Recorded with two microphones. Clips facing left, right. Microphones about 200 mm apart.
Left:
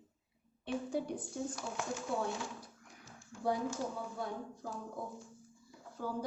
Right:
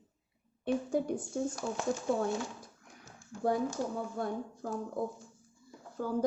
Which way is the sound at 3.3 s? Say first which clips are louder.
Right 4 dB; 40° right (ahead or behind).